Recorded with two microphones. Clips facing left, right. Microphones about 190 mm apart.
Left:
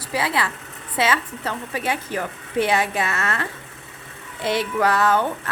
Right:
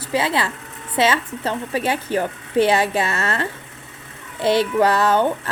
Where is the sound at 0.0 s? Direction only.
25° right (ahead or behind).